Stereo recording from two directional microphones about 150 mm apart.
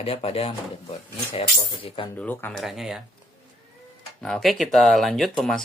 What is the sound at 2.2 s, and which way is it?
Speech, 10° left (ahead or behind).